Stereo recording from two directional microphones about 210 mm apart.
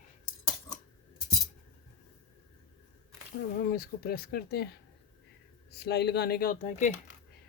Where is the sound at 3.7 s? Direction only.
45° left (ahead or behind).